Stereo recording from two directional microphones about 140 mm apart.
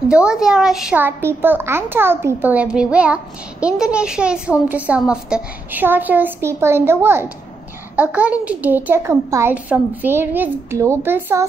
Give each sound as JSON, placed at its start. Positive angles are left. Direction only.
{"t": 0.1, "sound": "a woman's voice", "side_deg": -5}
{"t": 0.9, "sound": "a woman's voice", "side_deg": -15}